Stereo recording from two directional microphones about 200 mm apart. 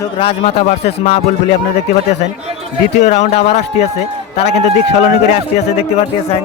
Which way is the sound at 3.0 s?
35° left (ahead or behind).